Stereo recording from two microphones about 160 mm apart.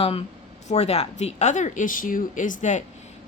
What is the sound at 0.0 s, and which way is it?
Speech, 40° left (ahead or behind).